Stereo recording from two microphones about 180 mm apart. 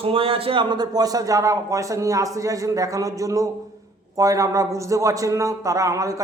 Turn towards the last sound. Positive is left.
turn(degrees=-20)  # may be behind; listen again after turning